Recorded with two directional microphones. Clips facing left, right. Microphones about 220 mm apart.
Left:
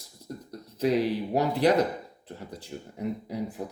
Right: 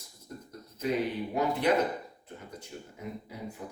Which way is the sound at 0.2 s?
35° left (ahead or behind).